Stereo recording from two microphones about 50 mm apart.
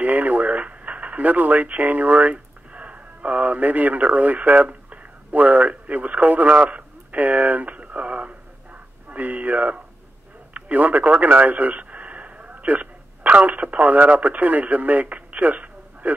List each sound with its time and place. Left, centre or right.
0.0 s radio: right
5.3 s a man's voice: right